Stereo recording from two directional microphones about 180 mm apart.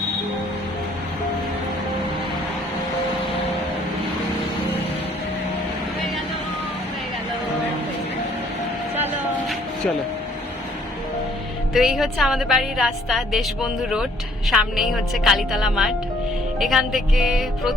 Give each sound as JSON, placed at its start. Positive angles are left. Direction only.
{"t": 11.7, "sound": "a woman's voice", "side_deg": 0}
{"t": 14.5, "sound": "a woman's voice", "side_deg": 0}